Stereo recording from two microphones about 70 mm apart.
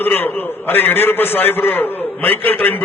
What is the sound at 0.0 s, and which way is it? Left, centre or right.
A man's voice, left.